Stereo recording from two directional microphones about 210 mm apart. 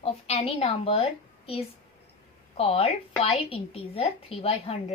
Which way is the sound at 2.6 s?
30° left (ahead or behind).